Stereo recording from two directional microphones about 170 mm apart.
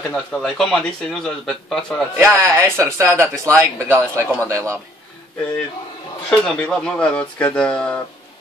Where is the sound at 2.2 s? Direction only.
15° right (ahead or behind).